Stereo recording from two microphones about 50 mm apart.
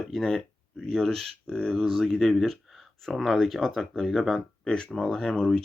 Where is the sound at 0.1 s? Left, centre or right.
Centre.